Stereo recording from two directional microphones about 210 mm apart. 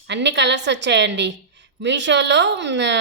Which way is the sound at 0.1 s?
55° right (ahead or behind).